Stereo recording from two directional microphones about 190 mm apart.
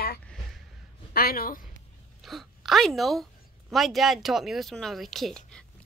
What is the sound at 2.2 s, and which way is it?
Speech, centre (ahead or behind).